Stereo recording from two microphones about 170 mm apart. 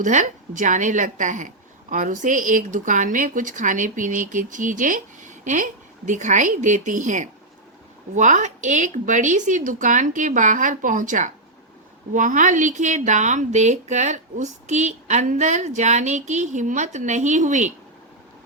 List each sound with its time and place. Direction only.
0.0 s a woman's voice: 45° right (ahead or behind)